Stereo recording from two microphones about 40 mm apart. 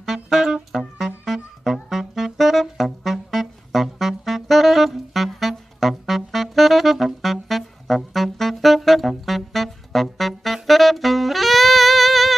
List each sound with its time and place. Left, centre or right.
0.0 s music: centre